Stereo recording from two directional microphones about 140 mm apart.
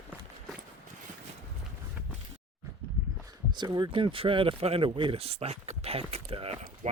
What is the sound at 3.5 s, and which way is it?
Speech, 30° right (ahead or behind).